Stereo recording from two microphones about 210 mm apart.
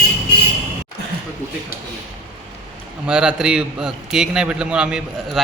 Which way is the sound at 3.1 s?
5° right (ahead or behind).